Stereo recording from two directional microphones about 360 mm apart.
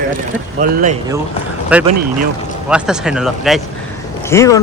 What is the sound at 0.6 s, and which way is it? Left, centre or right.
Speech, right.